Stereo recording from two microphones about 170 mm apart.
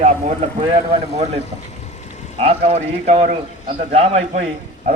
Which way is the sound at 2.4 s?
35° right (ahead or behind).